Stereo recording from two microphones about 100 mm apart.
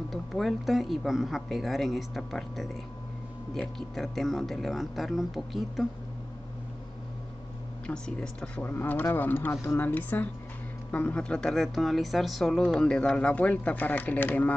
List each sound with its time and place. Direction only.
0.1 s speech: centre (ahead or behind)
7.8 s speech: 5° left (ahead or behind)
8.6 s speech: 20° left (ahead or behind)